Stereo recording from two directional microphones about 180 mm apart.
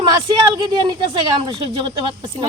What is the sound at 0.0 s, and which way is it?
Speech, 25° right (ahead or behind).